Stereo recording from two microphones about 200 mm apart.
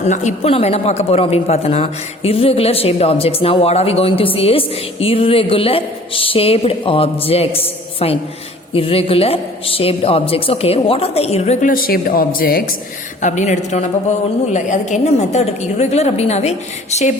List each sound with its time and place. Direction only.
0.0 s speech: 35° left (ahead or behind)
13.2 s a woman's voice: 35° left (ahead or behind)